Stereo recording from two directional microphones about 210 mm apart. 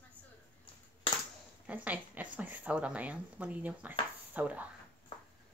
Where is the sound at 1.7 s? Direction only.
5° right (ahead or behind).